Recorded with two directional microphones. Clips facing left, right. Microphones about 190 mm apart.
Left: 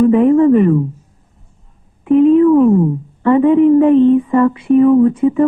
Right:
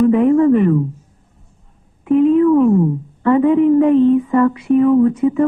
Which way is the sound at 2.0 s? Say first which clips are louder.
Left 3 dB; 25° left (ahead or behind).